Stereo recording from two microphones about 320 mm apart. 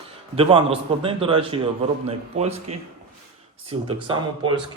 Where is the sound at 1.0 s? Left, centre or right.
Centre.